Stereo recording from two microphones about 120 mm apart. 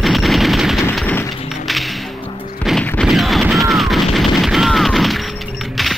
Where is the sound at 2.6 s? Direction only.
10° left (ahead or behind).